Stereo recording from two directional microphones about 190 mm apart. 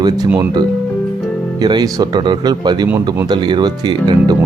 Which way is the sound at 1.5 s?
20° right (ahead or behind).